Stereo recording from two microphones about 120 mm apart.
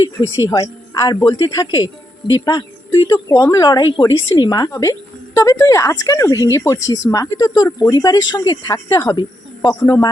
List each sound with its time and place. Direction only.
0.2 s a woman's voice: 30° left (ahead or behind)